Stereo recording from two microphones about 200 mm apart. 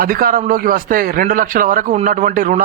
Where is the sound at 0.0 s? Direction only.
45° right (ahead or behind).